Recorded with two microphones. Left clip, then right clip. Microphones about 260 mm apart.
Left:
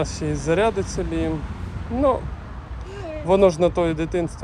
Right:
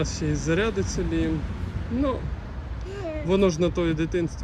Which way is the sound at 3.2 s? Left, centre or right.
Centre.